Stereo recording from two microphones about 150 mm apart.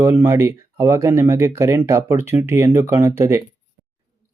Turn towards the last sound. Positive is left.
turn(degrees=-20)  # may be behind; listen again after turning